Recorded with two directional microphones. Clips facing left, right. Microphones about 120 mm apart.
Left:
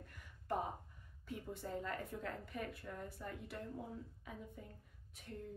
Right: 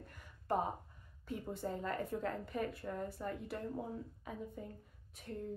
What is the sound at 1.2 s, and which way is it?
A woman's voice, 35° right (ahead or behind).